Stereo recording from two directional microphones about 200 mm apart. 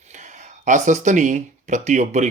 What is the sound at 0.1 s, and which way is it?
Speech, 35° right (ahead or behind).